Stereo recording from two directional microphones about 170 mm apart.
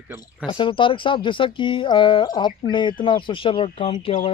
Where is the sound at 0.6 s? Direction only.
30° left (ahead or behind).